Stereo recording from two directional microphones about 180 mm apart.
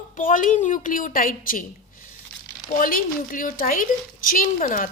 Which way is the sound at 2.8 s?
50° left (ahead or behind).